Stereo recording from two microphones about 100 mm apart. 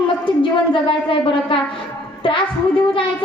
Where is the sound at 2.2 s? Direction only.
55° left (ahead or behind).